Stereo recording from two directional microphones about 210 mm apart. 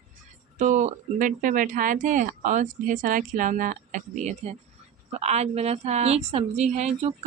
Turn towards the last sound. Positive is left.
turn(degrees=-35)  # may be behind; listen again after turning